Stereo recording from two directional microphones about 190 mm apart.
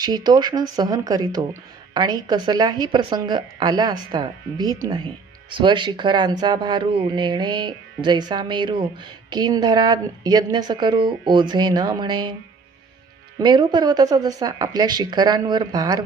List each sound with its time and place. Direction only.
0.0 s speech: 20° right (ahead or behind)
13.4 s speech: 25° right (ahead or behind)